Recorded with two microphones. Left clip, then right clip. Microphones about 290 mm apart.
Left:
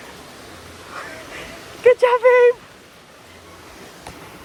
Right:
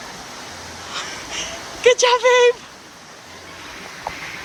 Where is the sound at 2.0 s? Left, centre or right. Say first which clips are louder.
Left 1 dB; centre.